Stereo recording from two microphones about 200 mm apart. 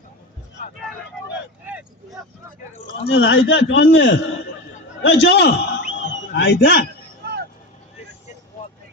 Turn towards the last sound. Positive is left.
turn(degrees=-55)  # may be behind; listen again after turning